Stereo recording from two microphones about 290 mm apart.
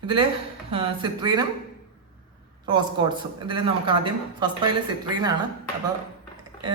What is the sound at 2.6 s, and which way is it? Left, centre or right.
Speech, centre.